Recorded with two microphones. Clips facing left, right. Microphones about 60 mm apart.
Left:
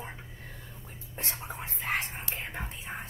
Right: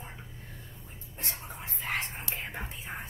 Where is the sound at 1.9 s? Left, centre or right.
Centre.